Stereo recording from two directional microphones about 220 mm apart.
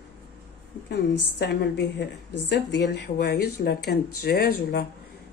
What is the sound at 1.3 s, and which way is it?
Speech, 50° left (ahead or behind).